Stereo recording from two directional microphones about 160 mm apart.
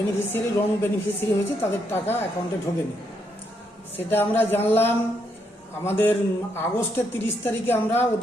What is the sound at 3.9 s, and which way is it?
A man's voice, 15° left (ahead or behind).